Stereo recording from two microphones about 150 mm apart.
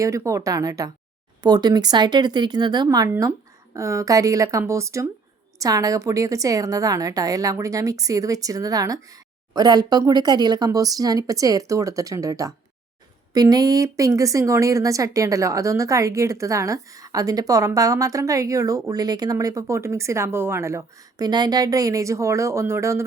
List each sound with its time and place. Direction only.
0.0 s speech: 20° right (ahead or behind)